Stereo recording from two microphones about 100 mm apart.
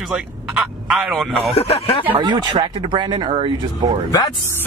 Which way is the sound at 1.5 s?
90° left.